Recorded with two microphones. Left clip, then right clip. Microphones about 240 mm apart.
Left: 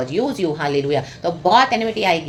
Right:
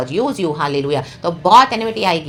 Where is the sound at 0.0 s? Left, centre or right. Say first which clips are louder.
Right 2 dB; centre.